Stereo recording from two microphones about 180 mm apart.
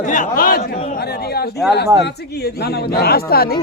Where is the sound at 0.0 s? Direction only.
45° left (ahead or behind).